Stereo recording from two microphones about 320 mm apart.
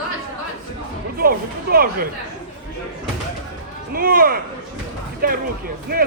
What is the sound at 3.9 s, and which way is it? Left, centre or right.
Speech, right.